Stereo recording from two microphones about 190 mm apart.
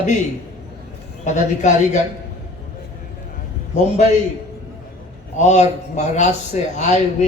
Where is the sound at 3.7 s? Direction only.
35° left (ahead or behind).